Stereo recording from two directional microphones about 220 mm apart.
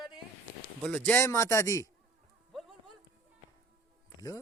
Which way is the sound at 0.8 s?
5° left (ahead or behind).